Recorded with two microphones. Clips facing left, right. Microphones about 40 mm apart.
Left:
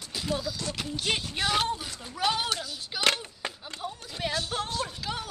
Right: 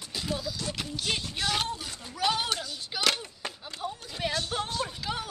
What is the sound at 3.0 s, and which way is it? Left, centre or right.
Speech, left.